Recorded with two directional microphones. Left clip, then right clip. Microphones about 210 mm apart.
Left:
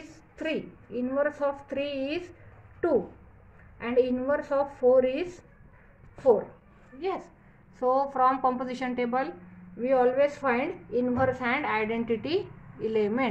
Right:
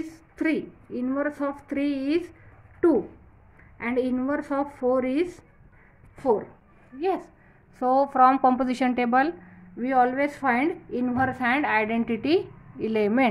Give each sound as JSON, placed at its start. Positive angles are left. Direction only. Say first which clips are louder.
{"t": 0.4, "sound": "a woman's voice", "louder": "right 5 dB", "side_deg": -50}
{"t": 3.7, "sound": "a woman's voice", "louder": "left 1 dB", "side_deg": -50}